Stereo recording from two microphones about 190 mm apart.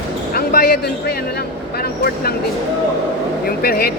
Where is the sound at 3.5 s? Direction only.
55° left (ahead or behind).